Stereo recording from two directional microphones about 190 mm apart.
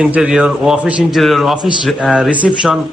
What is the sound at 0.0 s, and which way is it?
A man's voice, 5° right (ahead or behind).